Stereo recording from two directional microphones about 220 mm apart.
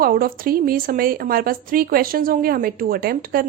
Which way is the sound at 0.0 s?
40° right (ahead or behind).